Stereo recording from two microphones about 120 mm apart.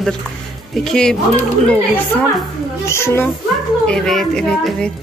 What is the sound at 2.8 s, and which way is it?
Speech, 20° left (ahead or behind).